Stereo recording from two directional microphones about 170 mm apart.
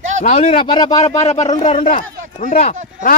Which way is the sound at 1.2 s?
40° left (ahead or behind).